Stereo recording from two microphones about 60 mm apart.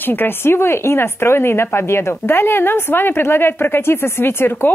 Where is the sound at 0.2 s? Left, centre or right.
Left.